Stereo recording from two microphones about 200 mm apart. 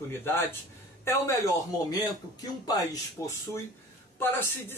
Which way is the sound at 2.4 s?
20° left (ahead or behind).